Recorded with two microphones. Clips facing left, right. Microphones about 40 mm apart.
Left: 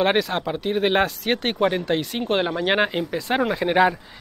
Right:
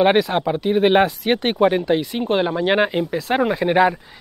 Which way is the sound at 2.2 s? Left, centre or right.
Centre.